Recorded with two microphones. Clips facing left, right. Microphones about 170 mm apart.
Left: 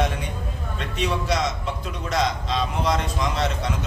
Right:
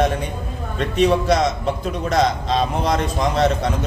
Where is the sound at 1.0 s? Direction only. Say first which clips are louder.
Right 8 dB; 45° right (ahead or behind).